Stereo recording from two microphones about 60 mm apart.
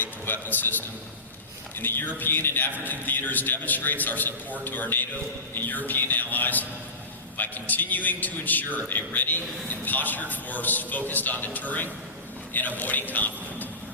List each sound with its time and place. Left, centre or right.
0.0 s a man's voice: left